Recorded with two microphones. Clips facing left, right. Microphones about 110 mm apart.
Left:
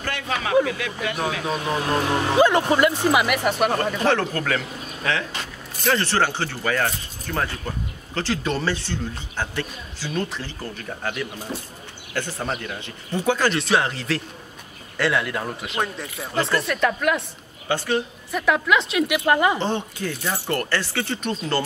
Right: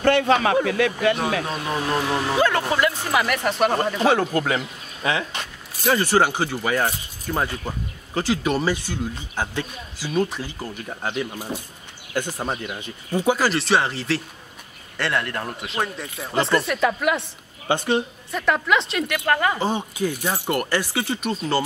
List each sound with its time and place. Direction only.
0.0 s a man's voice: 60° right (ahead or behind)
1.4 s speech: centre (ahead or behind)
2.2 s speech: 20° left (ahead or behind)
3.4 s speech: 5° left (ahead or behind)
3.7 s speech: 10° right (ahead or behind)
17.6 s speech: 20° right (ahead or behind)
18.3 s speech: centre (ahead or behind)
19.6 s speech: 10° right (ahead or behind)